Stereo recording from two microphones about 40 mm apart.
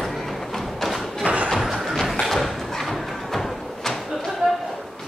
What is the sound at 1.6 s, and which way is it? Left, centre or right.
Thump, centre.